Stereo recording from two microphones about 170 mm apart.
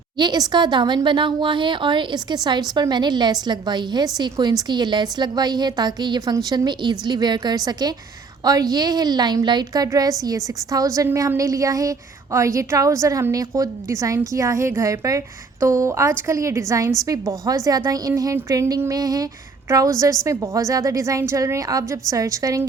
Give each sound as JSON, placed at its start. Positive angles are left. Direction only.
{"t": 0.2, "sound": "a woman's voice", "side_deg": -25}